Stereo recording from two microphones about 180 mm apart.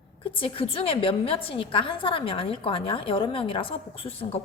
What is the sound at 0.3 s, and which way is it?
A woman's voice, 30° left (ahead or behind).